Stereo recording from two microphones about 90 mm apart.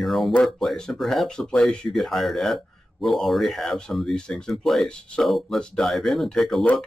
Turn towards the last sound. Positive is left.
turn(degrees=0)  # may be behind; listen again after turning